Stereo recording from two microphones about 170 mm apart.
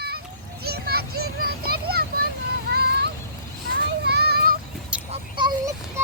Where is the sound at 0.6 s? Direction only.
65° right (ahead or behind).